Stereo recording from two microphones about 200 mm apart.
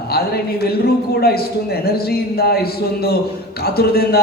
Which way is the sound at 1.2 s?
50° left (ahead or behind).